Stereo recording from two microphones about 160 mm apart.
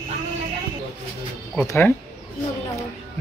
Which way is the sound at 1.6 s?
15° left (ahead or behind).